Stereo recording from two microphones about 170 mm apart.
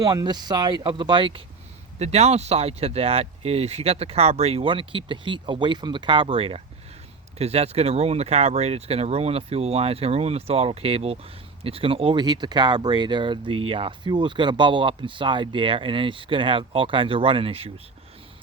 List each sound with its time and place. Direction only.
0.0 s speech: 25° right (ahead or behind)
2.0 s speech: 40° right (ahead or behind)